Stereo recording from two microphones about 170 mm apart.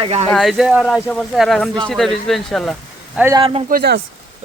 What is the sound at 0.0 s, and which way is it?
Speech, 35° right (ahead or behind).